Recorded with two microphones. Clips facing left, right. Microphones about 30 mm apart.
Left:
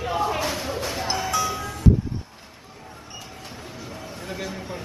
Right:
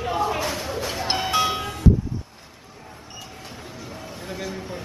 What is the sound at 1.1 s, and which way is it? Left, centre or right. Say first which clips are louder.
Music: right 4 dB; right.